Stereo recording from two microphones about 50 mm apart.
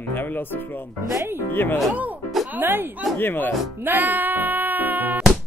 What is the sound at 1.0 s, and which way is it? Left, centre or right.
Speech, right.